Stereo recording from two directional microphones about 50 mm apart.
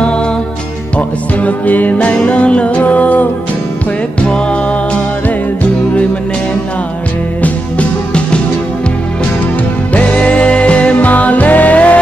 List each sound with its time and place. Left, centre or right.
0.9 s music: left
7.4 s music: left
9.9 s music: left